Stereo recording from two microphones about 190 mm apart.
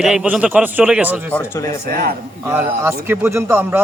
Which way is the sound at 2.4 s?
10° right (ahead or behind).